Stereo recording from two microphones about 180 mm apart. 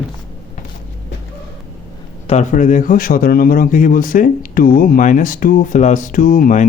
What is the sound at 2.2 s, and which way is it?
Speech, 40° left (ahead or behind).